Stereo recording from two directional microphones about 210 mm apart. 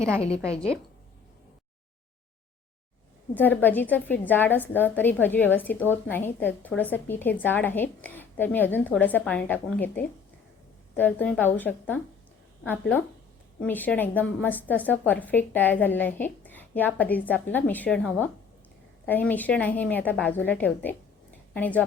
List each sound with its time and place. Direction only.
0.2 s a woman's voice: 30° left (ahead or behind)
3.6 s a woman's voice: 10° left (ahead or behind)